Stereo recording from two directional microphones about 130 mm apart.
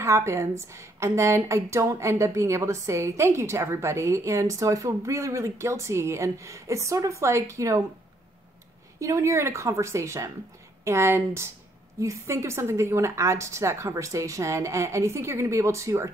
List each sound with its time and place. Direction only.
0.0 s a woman's voice: 20° right (ahead or behind)
9.0 s a woman's voice: 25° right (ahead or behind)